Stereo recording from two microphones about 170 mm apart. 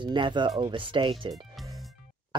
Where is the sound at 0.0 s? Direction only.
30° right (ahead or behind).